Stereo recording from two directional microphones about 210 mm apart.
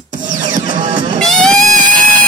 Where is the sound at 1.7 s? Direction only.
35° right (ahead or behind).